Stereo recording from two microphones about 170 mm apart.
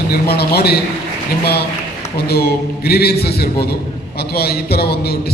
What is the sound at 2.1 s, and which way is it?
A man's voice, 65° left (ahead or behind).